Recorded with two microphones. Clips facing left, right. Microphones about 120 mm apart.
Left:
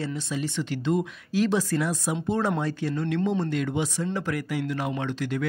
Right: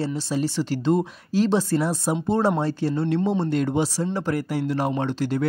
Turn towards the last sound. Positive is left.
turn(degrees=-35)  # may be behind; listen again after turning